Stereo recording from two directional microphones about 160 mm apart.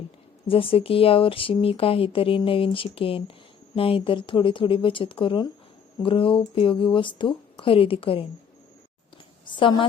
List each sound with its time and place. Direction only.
0.4 s speech: 35° left (ahead or behind)
9.5 s speech: 30° left (ahead or behind)